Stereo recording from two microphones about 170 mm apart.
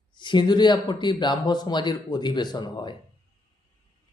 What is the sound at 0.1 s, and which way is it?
Speech, 25° left (ahead or behind).